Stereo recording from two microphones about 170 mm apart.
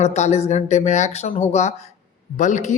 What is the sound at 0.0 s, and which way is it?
Speech, 40° left (ahead or behind).